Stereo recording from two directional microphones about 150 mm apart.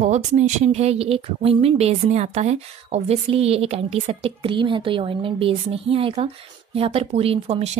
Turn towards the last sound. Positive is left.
turn(degrees=-40)  # may be behind; listen again after turning